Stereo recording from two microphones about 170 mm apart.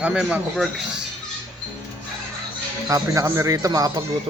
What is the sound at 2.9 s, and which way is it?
Speech, 20° right (ahead or behind).